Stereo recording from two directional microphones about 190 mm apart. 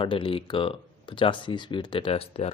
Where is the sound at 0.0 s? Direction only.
25° left (ahead or behind).